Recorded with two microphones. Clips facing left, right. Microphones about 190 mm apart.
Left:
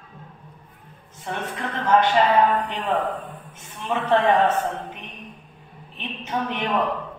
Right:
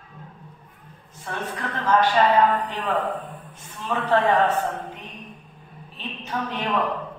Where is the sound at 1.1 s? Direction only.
20° left (ahead or behind).